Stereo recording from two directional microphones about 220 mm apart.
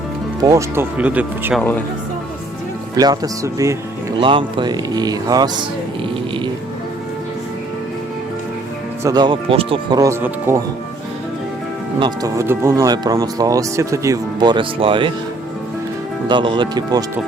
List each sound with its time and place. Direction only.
0.4 s speech: 15° right (ahead or behind)
2.9 s speech: 15° right (ahead or behind)
9.0 s speech: 20° right (ahead or behind)
11.9 s speech: 20° right (ahead or behind)
16.3 s speech: 20° right (ahead or behind)